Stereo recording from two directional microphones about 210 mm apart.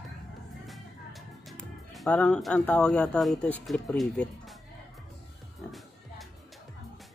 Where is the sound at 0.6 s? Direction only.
Centre (ahead or behind).